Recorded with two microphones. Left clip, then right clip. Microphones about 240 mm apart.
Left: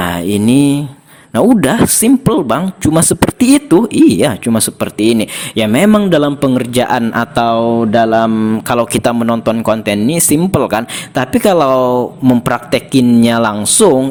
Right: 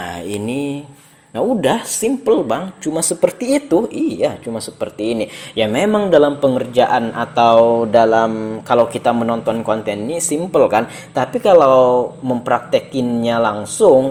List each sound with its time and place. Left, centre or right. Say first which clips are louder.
0.0 s mantra: left 9 dB; left
1.3 s speech: left 5 dB; left